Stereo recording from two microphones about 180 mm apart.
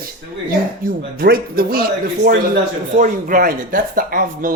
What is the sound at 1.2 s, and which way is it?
A man's voice, 55° right (ahead or behind).